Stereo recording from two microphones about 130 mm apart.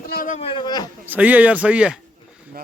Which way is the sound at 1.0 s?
15° right (ahead or behind).